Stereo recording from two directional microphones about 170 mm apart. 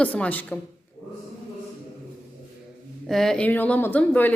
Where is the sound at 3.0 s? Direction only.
Centre (ahead or behind).